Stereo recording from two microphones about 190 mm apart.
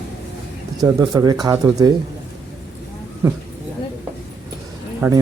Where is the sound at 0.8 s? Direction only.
20° right (ahead or behind).